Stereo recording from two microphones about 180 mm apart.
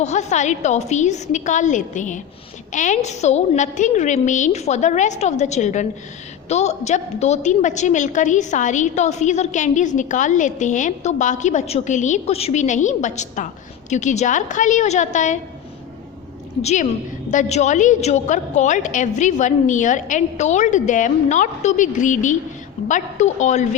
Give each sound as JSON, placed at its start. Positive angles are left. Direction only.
{"t": 0.0, "sound": "a woman's voice", "side_deg": 40}
{"t": 16.6, "sound": "a woman's voice", "side_deg": 35}